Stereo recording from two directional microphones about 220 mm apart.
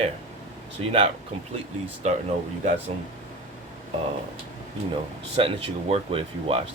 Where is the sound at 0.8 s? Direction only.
25° right (ahead or behind).